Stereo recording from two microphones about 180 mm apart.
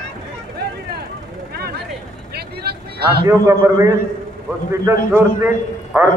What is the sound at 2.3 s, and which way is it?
Vehicle, 60° right (ahead or behind).